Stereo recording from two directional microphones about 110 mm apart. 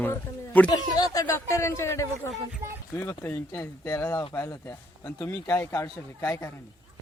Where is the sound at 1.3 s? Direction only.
25° left (ahead or behind).